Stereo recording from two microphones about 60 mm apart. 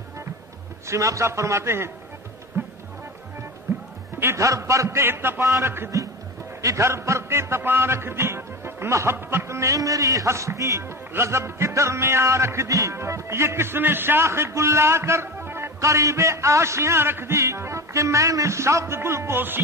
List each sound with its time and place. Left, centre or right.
0.8 s music: right
4.4 s a man's voice: right
5.0 s a sound: right
6.6 s music: right
14.2 s a man's voice: right
15.8 s music: right